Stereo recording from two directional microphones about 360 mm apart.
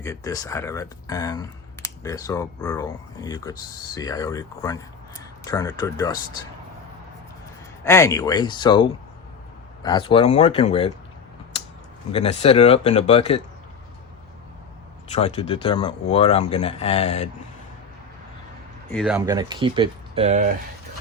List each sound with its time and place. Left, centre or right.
0.0 s speech: centre
7.9 s speech: centre
12.1 s speech: centre
15.1 s speech: centre
18.9 s speech: centre